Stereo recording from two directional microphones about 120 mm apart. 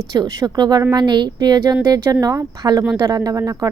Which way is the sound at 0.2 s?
35° right (ahead or behind).